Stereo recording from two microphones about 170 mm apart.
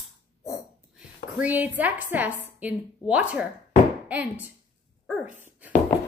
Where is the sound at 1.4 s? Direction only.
10° right (ahead or behind).